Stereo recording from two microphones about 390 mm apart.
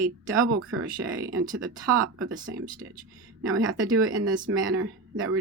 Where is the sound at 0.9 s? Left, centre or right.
Right.